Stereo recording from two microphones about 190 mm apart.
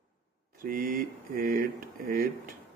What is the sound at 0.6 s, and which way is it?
Speech, 50° right (ahead or behind).